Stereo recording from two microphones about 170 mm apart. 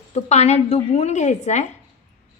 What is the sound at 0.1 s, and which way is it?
A woman's voice, 40° left (ahead or behind).